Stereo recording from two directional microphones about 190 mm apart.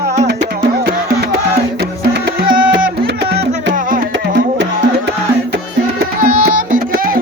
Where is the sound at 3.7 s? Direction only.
45° right (ahead or behind).